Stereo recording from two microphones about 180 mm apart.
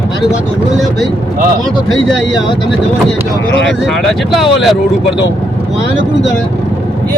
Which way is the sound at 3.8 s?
Centre (ahead or behind).